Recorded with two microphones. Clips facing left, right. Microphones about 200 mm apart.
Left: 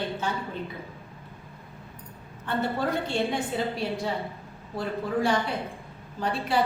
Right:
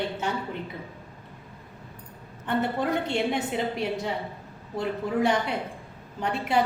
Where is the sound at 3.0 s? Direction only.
20° right (ahead or behind).